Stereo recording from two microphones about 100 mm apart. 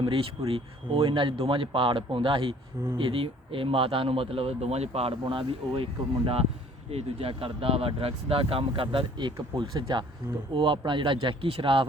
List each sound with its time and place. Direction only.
0.0 s speech: 65° right (ahead or behind); by 5.1 s 90° right
5.2 s speech: 60° right (ahead or behind)